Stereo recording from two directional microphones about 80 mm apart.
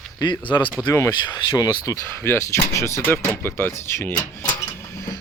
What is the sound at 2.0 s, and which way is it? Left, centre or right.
Speech, left.